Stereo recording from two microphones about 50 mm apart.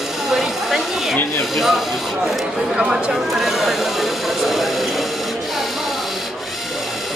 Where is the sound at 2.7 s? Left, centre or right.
Centre.